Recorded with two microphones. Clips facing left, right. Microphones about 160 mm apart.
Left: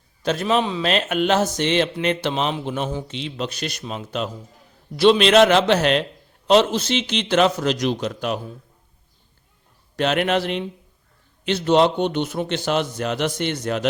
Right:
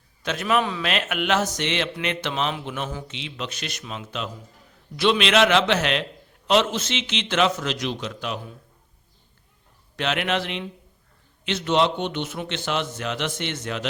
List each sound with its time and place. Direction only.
0.2 s speech: 35° left (ahead or behind)
9.9 s speech: 40° left (ahead or behind)